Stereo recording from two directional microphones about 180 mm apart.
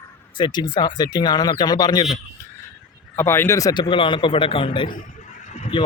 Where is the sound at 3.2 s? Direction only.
15° left (ahead or behind); by 4.9 s 30° left (ahead or behind).